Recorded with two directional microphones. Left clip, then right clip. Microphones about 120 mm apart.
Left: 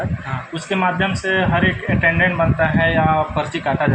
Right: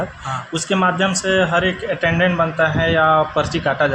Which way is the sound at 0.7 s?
90° right.